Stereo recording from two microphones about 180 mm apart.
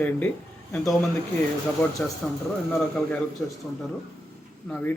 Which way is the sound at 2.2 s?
5° left (ahead or behind).